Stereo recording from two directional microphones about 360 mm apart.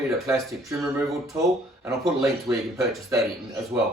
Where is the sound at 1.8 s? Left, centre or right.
Centre.